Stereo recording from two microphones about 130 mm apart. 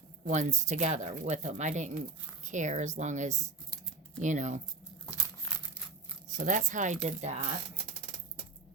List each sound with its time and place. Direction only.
0.3 s a woman's voice: 65° right (ahead or behind)
6.3 s a woman's voice: 75° right (ahead or behind); by 7.4 s 55° right (ahead or behind)